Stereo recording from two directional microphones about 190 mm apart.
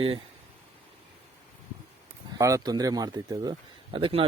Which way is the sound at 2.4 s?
15° right (ahead or behind).